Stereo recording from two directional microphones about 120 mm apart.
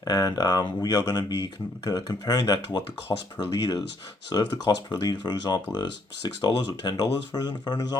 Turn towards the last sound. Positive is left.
turn(degrees=35)  # may be behind; listen again after turning